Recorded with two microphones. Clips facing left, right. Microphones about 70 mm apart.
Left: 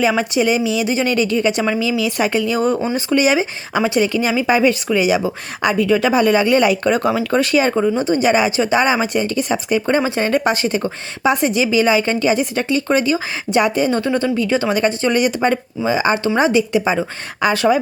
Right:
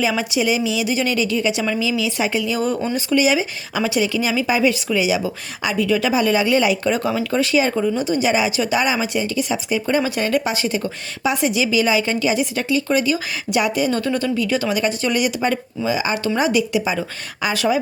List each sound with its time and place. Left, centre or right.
0.2 s speech: left
10.0 s a woman's voice: left
10.4 s a woman's voice: left